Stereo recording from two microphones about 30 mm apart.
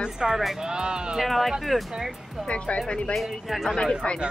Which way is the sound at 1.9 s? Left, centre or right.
Centre.